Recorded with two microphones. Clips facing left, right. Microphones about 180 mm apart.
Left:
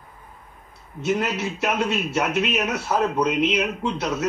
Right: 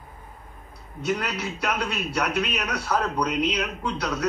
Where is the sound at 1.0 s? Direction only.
25° left (ahead or behind).